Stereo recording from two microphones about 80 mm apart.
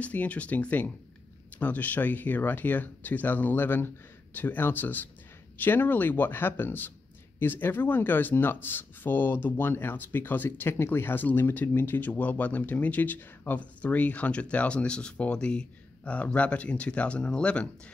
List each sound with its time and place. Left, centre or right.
0.0 s speech: centre